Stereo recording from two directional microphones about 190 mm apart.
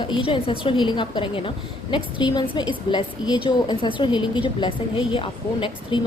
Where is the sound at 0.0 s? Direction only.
25° left (ahead or behind).